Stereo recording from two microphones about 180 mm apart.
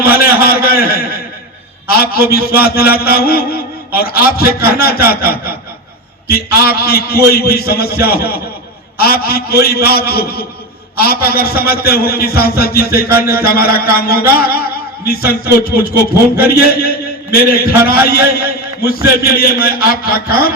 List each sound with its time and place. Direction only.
0.3 s a man's voice: 55° left (ahead or behind)
18.1 s a man's voice: 60° left (ahead or behind)